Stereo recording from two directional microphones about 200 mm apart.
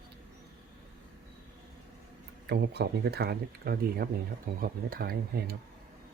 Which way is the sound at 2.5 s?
55° right (ahead or behind).